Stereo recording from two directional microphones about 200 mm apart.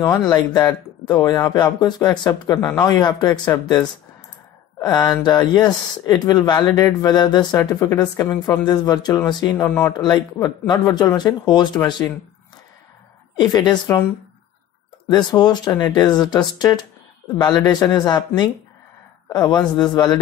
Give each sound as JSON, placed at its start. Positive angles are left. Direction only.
{"t": 0.3, "sound": "speech", "side_deg": 20}
{"t": 4.7, "sound": "speech", "side_deg": 20}
{"t": 13.4, "sound": "speech", "side_deg": 20}
{"t": 15.0, "sound": "speech", "side_deg": 20}